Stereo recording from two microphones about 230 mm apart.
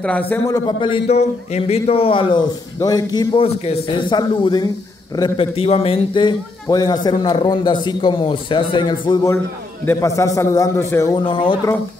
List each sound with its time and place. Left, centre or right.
0.0 s a man's voice: centre
0.7 s a man's voice: left